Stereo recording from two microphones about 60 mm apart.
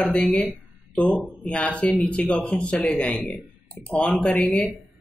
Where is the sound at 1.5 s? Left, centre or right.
Centre.